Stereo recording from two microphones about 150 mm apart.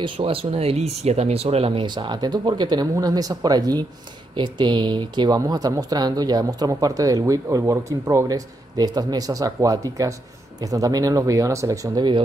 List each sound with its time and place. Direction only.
0.0 s speech: 40° right (ahead or behind)